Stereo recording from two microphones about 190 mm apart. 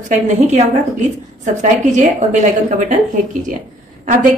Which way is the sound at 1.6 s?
40° right (ahead or behind).